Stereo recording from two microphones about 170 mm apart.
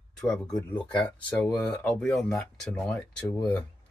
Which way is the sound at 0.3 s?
20° left (ahead or behind).